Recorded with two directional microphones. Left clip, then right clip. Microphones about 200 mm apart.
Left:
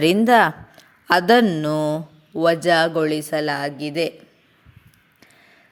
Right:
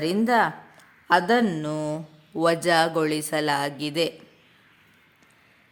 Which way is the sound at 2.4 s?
10° left (ahead or behind).